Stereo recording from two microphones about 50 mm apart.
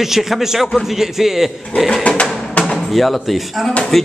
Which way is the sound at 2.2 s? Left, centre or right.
Centre.